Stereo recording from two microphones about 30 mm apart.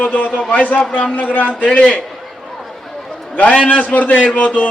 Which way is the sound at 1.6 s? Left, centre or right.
Left.